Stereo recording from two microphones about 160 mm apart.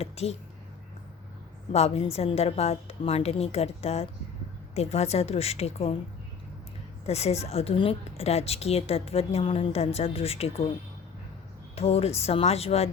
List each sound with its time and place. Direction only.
0.0 s a woman's voice: 40° left (ahead or behind)
1.7 s a woman's voice: 40° left (ahead or behind)
7.1 s a woman's voice: 40° left (ahead or behind)
11.7 s a woman's voice: 40° left (ahead or behind)